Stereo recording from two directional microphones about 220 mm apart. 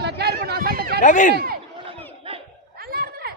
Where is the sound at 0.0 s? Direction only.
45° right (ahead or behind).